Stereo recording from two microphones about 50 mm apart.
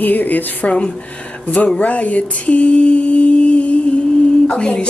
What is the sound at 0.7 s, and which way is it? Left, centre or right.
Speech, left.